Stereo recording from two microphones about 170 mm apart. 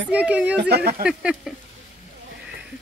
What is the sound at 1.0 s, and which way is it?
Speech, 5° right (ahead or behind).